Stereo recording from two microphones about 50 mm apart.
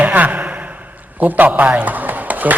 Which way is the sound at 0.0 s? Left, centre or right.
Right.